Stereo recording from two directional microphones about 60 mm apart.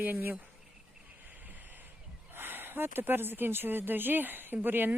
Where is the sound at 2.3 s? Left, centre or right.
Right.